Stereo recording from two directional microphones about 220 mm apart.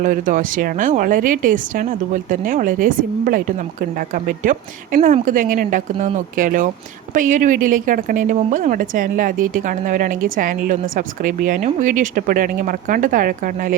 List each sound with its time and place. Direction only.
0.0 s a woman's voice: 35° right (ahead or behind)